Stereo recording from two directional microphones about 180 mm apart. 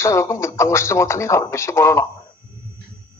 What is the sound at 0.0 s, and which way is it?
Speech, 15° left (ahead or behind).